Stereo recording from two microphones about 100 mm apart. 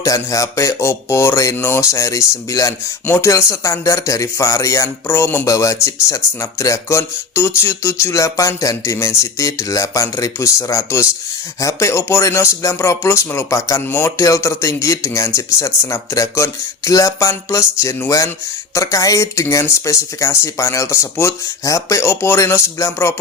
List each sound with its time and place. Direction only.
0.0 s speech: 35° left (ahead or behind)